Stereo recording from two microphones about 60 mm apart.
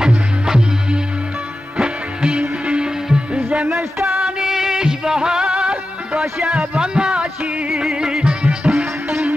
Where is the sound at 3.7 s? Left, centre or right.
Right.